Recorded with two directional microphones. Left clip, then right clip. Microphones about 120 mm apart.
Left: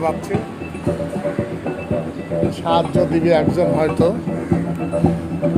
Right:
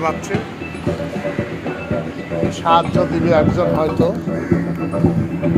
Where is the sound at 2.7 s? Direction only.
50° left (ahead or behind).